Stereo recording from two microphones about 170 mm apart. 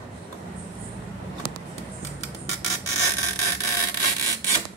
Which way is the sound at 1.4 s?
65° left (ahead or behind).